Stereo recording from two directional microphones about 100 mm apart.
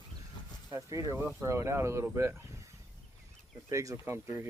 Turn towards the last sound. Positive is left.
turn(degrees=-25)  # may be behind; listen again after turning